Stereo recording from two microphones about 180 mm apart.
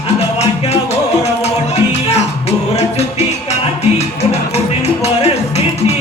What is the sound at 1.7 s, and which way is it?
Music, 35° left (ahead or behind).